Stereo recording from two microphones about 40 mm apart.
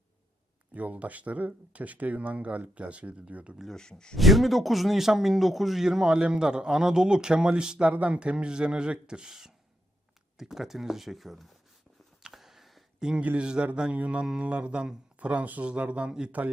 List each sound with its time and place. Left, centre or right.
0.7 s speech: right
3.7 s speech: centre
4.2 s a man's voice: centre
12.3 s a sound: centre
13.0 s a man's voice: centre
13.9 s speech: right